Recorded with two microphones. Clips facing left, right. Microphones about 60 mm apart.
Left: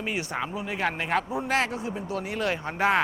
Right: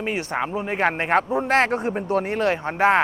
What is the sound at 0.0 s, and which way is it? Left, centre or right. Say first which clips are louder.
A man's voice: right 5 dB; right.